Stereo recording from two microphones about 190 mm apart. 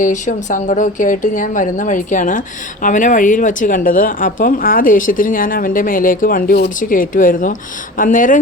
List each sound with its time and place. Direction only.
0.0 s speech: 45° left (ahead or behind)